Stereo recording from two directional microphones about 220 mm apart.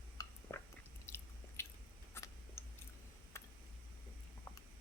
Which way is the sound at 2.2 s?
10° left (ahead or behind).